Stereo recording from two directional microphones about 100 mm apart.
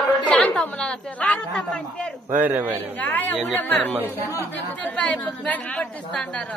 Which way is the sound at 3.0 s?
15° left (ahead or behind).